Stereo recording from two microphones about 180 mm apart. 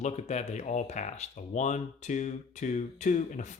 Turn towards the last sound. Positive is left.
turn(degrees=45)  # may be behind; listen again after turning